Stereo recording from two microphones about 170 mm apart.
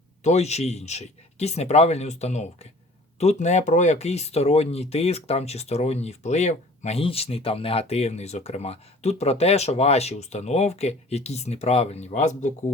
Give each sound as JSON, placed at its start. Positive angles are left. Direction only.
{"t": 0.2, "sound": "speech", "side_deg": 40}